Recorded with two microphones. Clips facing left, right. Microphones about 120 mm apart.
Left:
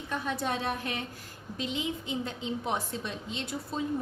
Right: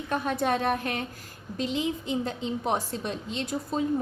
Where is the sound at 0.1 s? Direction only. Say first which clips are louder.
Right 5 dB; 55° right (ahead or behind).